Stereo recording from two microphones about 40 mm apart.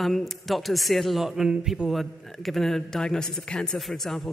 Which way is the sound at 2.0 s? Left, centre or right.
Centre.